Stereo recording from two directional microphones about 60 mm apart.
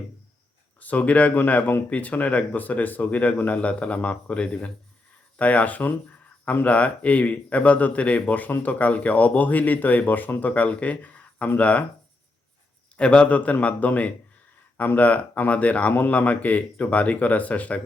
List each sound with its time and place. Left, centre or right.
0.8 s speech: left
13.0 s speech: centre